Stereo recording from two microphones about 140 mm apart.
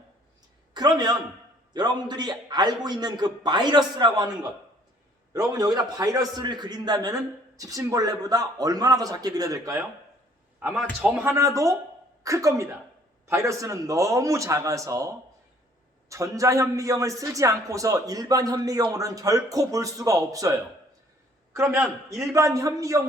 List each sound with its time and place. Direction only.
0.7 s a man's voice: 30° right (ahead or behind)
10.6 s a man's voice: 10° right (ahead or behind)